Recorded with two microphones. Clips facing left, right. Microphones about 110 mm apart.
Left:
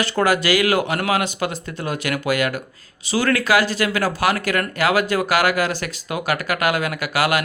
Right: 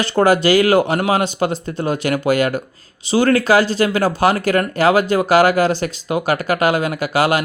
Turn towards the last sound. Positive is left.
turn(degrees=-25)  # may be behind; listen again after turning